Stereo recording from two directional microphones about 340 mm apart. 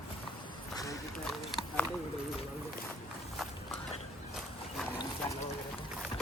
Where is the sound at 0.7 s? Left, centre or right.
Centre.